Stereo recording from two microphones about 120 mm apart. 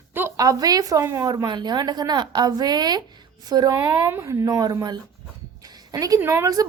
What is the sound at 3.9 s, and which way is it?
A woman's voice, 25° right (ahead or behind).